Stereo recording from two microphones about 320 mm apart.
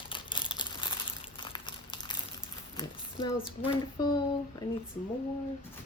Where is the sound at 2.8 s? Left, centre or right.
Centre.